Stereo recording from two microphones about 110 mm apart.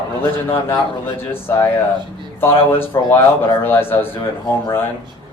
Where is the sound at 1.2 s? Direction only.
20° left (ahead or behind).